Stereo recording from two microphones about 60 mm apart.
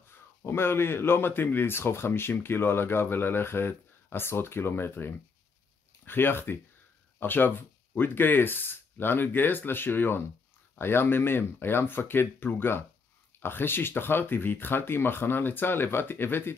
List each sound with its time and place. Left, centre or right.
0.1 s speech: left